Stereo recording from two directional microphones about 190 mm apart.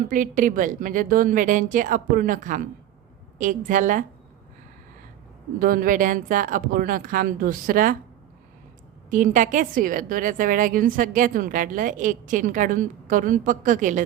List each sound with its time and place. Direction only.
0.1 s a woman's voice: 45° right (ahead or behind)
5.5 s a woman's voice: 50° right (ahead or behind)
9.0 s a woman's voice: 40° right (ahead or behind)